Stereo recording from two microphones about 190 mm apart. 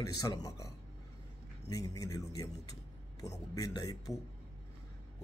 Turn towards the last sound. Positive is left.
turn(degrees=20)  # may be behind; listen again after turning